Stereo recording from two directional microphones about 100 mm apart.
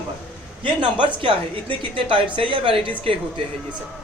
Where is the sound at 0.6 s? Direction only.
55° right (ahead or behind).